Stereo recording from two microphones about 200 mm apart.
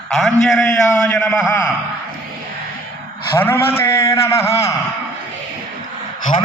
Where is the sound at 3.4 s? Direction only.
10° left (ahead or behind).